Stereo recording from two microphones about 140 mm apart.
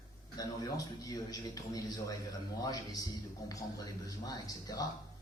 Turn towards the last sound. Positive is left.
turn(degrees=25)  # may be behind; listen again after turning